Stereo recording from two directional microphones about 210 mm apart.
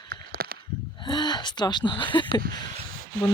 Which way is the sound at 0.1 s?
45° right (ahead or behind).